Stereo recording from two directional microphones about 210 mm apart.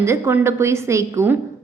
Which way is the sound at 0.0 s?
15° right (ahead or behind).